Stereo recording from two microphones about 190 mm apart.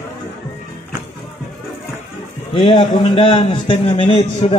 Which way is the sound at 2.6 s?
25° left (ahead or behind).